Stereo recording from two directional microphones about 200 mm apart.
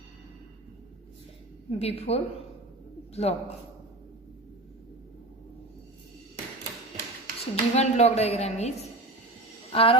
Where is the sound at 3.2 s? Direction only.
30° left (ahead or behind).